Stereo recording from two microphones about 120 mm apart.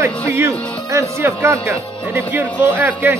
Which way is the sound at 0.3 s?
25° right (ahead or behind).